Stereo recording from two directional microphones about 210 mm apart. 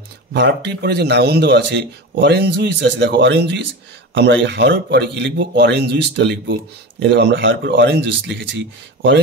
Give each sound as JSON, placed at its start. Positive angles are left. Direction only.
{"t": 0.3, "sound": "speech", "side_deg": -55}